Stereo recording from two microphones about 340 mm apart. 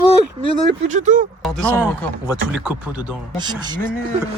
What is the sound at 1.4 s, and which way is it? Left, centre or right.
Speech, centre.